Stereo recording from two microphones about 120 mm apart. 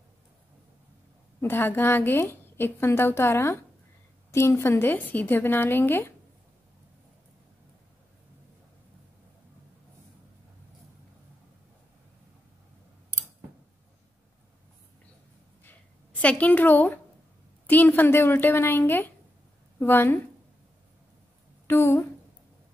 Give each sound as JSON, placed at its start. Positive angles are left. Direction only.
{"t": 1.4, "sound": "a woman's voice", "side_deg": 15}
{"t": 15.6, "sound": "a sound", "side_deg": 10}
{"t": 17.6, "sound": "a woman's voice", "side_deg": 15}
{"t": 21.6, "sound": "a woman's voice", "side_deg": 20}